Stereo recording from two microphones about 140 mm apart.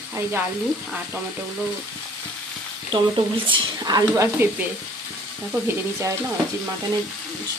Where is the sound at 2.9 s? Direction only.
35° right (ahead or behind); by 4.6 s 20° right (ahead or behind).